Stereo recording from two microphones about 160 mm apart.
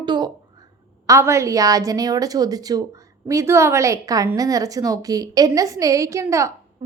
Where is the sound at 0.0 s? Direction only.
30° right (ahead or behind).